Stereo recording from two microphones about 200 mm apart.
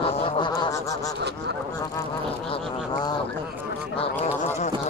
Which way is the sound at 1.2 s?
55° right (ahead or behind).